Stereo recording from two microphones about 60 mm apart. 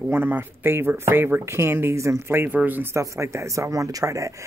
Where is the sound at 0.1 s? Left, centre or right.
Right.